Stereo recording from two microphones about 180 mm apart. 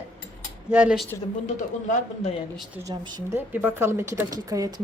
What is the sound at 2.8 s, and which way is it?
Speech, 20° right (ahead or behind).